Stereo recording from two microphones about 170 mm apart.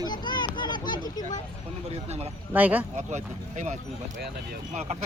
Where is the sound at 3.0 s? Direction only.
45° right (ahead or behind).